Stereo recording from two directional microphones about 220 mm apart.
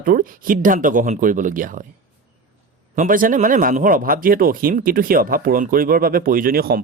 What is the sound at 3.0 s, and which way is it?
Speech, 40° right (ahead or behind).